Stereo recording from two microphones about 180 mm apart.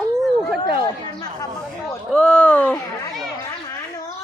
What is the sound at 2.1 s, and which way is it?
Speech, 5° left (ahead or behind).